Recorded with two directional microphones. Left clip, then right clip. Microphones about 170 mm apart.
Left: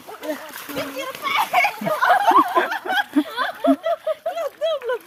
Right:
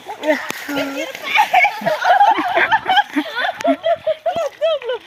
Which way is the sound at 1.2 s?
25° left (ahead or behind).